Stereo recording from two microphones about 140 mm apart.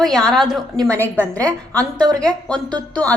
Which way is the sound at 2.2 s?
5° left (ahead or behind).